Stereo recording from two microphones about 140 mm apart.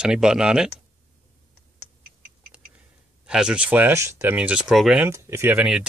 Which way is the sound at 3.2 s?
5° right (ahead or behind).